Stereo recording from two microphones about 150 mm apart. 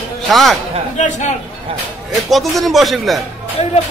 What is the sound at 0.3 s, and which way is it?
Speech, centre (ahead or behind).